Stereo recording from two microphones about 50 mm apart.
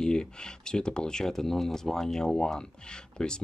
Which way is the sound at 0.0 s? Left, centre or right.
Centre.